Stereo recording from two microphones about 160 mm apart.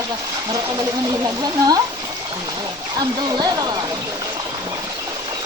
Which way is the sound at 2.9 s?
25° right (ahead or behind).